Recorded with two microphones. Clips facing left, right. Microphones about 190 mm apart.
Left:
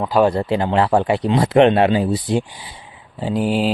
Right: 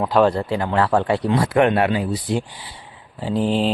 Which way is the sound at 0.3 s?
20° left (ahead or behind).